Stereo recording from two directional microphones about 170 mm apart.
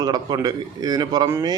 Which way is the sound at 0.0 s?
25° right (ahead or behind).